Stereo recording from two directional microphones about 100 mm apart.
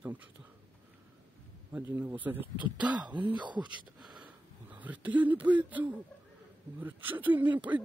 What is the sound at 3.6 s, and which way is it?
Speech, 10° right (ahead or behind).